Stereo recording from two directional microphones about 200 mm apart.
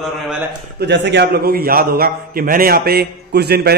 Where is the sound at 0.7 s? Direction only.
60° right (ahead or behind).